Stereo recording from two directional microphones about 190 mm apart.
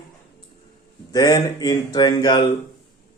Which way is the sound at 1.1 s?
20° left (ahead or behind).